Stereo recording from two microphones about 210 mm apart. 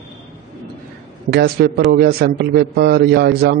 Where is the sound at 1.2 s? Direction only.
50° right (ahead or behind).